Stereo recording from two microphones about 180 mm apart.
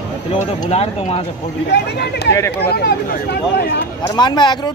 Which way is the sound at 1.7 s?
65° left (ahead or behind).